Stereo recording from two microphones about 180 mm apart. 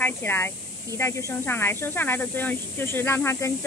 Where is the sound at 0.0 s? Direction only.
10° left (ahead or behind).